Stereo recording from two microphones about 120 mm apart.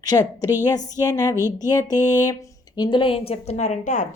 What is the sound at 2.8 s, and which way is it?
A woman's voice, 45° left (ahead or behind).